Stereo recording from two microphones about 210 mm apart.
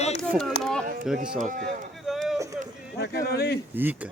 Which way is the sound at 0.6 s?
5° left (ahead or behind).